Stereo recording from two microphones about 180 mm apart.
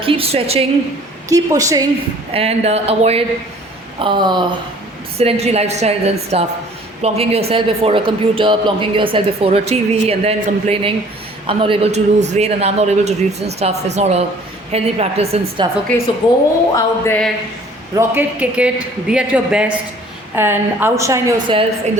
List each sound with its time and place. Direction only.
0.0 s speech: 30° right (ahead or behind)
1.3 s a woman's voice: 20° right (ahead or behind)
2.3 s a woman's voice: 35° right (ahead or behind)
5.1 s speech: 35° right (ahead or behind)
16.2 s a woman's voice: 25° left (ahead or behind)
16.7 s a sound: 15° left (ahead or behind)
17.9 s a man's voice: 10° right (ahead or behind)